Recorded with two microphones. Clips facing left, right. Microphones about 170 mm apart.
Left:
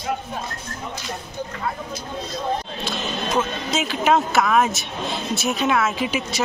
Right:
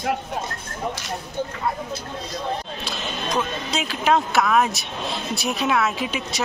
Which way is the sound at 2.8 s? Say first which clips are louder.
Left 3 dB; centre (ahead or behind).